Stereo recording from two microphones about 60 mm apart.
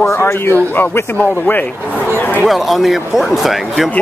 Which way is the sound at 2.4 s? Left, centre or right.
Centre.